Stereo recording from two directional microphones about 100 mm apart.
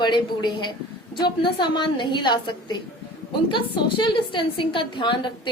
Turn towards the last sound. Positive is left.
turn(degrees=55)  # may be behind; listen again after turning